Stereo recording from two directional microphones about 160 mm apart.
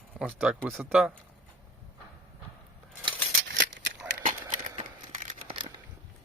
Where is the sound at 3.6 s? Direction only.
90° right.